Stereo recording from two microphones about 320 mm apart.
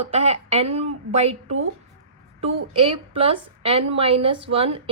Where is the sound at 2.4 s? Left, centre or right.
Centre.